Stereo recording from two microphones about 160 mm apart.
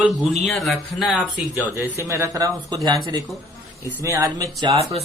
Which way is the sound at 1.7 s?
15° right (ahead or behind).